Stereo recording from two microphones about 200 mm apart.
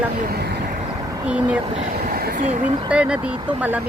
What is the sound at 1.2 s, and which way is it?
Speech, 5° right (ahead or behind).